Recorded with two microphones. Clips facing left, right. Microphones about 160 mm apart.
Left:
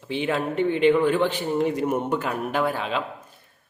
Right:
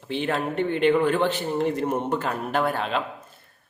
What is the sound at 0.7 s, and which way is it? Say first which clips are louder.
Speech: left 1 dB; 50° right (ahead or behind).